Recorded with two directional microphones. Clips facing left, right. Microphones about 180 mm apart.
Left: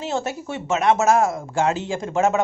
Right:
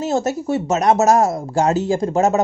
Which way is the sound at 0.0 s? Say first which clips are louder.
Right 6 dB; 40° right (ahead or behind).